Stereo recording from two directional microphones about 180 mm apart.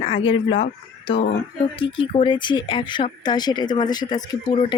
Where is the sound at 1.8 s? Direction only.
30° left (ahead or behind).